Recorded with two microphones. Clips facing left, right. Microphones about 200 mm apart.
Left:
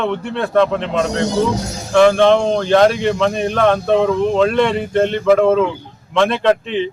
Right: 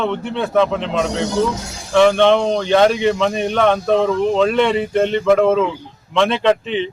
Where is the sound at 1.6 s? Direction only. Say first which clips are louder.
Left 6 dB; 40° left (ahead or behind).